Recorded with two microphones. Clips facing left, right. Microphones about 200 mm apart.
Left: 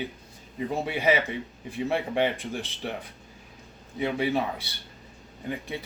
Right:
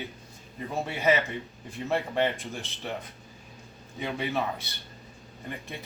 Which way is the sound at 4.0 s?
10° left (ahead or behind).